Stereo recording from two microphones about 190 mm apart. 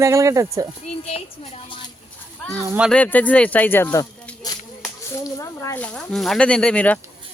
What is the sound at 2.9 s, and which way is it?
Speech, 5° left (ahead or behind).